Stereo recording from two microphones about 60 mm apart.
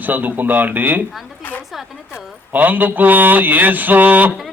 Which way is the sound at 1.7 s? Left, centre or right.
Centre.